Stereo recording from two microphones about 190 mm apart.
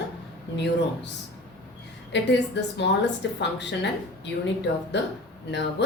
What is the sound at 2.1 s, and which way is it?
Speech, 65° left (ahead or behind).